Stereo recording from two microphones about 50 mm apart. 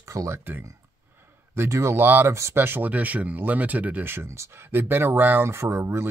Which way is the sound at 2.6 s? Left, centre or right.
Right.